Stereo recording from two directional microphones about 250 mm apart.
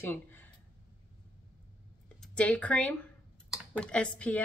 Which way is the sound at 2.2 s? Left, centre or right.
Centre.